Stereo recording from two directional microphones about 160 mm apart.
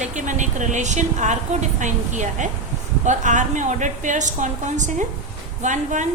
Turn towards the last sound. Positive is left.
turn(degrees=-50)  # may be behind; listen again after turning